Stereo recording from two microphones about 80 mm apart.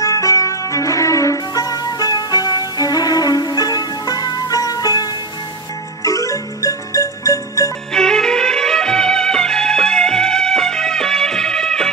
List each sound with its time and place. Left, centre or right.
0.0 s music: left
7.9 s music: centre